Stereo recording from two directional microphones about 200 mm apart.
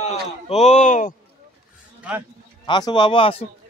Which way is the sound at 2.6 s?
20° left (ahead or behind).